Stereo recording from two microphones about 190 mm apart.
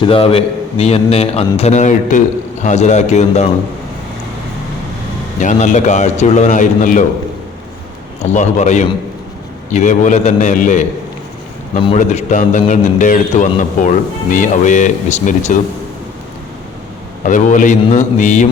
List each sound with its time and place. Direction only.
0.0 s a man's voice: 30° left (ahead or behind)
5.4 s a man's voice: 40° left (ahead or behind)
8.2 s a man's voice: 40° left (ahead or behind)
11.9 s a man's voice: 40° left (ahead or behind)
17.2 s a man's voice: 40° left (ahead or behind)